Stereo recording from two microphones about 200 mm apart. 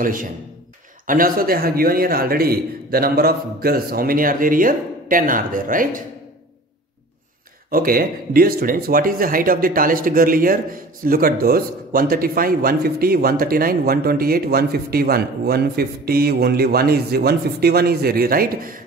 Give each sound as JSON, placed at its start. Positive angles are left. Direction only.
{"t": 0.0, "sound": "speech", "side_deg": -45}
{"t": 7.7, "sound": "speech", "side_deg": -45}